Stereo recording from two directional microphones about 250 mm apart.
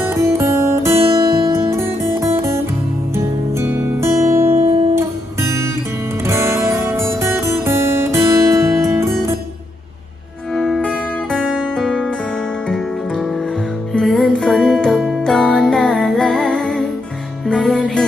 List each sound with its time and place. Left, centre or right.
0.0 s music: centre
3.6 s music: centre
4.5 s guitar: right
4.9 s music: centre
10.5 s music: centre